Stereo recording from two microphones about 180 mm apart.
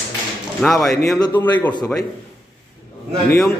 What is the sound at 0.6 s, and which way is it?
A man's voice, centre (ahead or behind).